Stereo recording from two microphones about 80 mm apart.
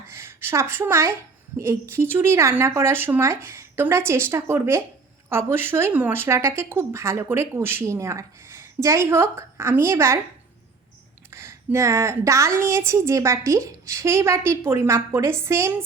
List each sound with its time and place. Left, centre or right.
0.1 s a woman's voice: right
11.3 s speech: right